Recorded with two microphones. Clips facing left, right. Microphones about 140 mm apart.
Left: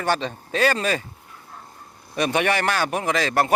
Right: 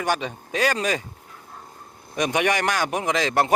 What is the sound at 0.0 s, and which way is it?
Speech, 10° right (ahead or behind).